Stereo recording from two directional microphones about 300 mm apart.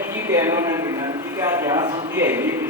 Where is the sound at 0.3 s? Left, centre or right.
Centre.